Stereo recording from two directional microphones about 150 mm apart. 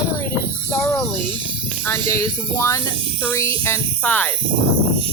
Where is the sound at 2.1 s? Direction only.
20° left (ahead or behind).